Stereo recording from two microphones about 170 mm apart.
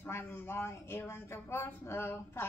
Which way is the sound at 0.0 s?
15° left (ahead or behind).